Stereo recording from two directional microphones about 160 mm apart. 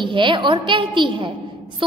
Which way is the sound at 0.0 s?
30° right (ahead or behind).